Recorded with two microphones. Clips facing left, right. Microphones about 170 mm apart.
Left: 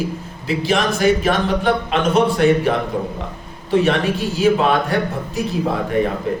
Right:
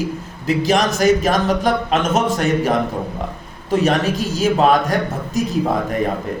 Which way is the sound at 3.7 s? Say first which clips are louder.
Even; 40° right (ahead or behind).